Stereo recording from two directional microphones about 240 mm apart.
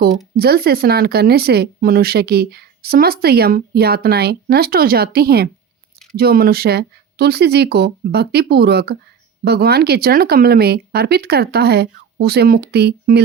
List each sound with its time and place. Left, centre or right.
0.3 s speech: right